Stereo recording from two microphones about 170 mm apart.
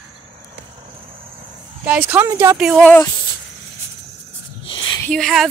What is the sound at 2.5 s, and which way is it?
Speech, 5° right (ahead or behind).